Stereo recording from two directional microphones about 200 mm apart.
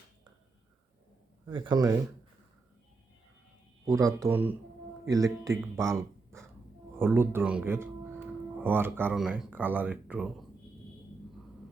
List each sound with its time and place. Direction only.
1.5 s speech: 25° right (ahead or behind)
3.8 s speech: 15° right (ahead or behind)